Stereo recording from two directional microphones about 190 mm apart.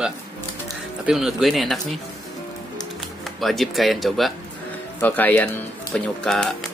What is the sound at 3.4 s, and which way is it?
Speech, centre (ahead or behind).